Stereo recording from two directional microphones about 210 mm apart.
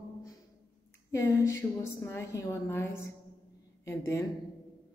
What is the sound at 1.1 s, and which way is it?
A woman's voice, 15° left (ahead or behind).